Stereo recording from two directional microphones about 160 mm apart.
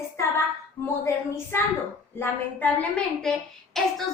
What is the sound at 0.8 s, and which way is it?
A woman's voice, 15° left (ahead or behind).